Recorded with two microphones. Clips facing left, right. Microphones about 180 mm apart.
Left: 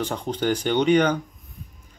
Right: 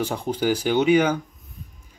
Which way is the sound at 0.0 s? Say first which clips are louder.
Right 1 dB; 10° right (ahead or behind).